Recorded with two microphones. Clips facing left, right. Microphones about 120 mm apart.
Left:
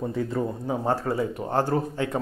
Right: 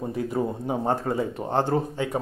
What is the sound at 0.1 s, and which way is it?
Speech, 15° right (ahead or behind).